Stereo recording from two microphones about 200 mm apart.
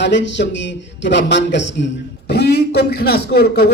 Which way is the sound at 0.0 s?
60° left (ahead or behind).